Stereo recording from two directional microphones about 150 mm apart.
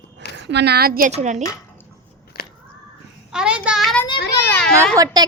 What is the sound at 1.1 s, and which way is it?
Speech, 50° right (ahead or behind).